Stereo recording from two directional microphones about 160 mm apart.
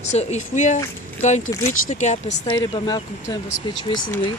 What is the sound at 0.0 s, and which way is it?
Speech, 45° left (ahead or behind).